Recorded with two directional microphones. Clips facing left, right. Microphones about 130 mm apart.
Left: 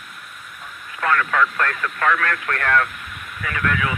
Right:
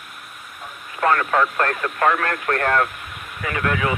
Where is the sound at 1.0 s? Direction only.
30° right (ahead or behind).